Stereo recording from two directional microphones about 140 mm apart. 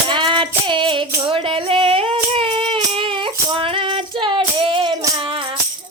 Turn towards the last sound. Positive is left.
turn(degrees=-40)  # may be behind; listen again after turning